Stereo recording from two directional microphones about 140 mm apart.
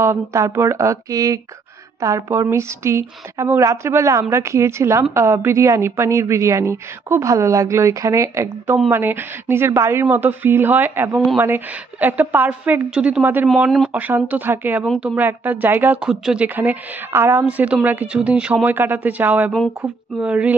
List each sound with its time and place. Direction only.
0.0 s a woman's voice: 20° right (ahead or behind)